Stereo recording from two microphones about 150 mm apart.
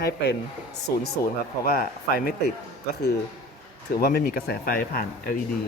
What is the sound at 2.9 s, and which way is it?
Speech, 90° left.